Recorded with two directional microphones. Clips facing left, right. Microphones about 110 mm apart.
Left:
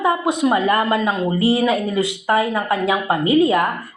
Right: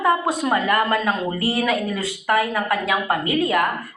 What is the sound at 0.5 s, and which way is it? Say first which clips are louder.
A woman's voice: left 2 dB; 25° left (ahead or behind).